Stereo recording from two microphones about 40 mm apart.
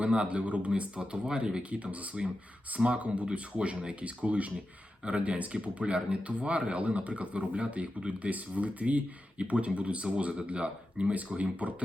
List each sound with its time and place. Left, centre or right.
0.0 s a man's voice: right